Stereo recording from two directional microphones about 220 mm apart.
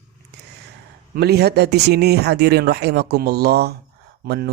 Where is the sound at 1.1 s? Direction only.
45° right (ahead or behind).